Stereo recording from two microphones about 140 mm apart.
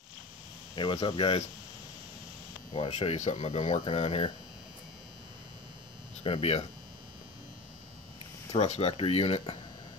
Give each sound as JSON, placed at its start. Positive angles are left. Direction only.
{"t": 0.7, "sound": "speech", "side_deg": 35}
{"t": 2.7, "sound": "speech", "side_deg": 45}
{"t": 6.2, "sound": "speech", "side_deg": 45}
{"t": 8.5, "sound": "speech", "side_deg": 50}